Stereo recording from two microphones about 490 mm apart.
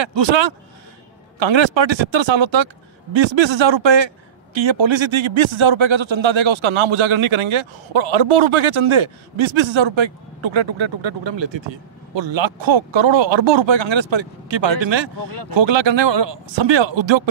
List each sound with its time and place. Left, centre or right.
0.0 s a man's voice: right
9.6 s speech: right